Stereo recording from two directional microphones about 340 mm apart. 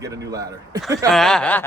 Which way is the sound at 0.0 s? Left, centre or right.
Centre.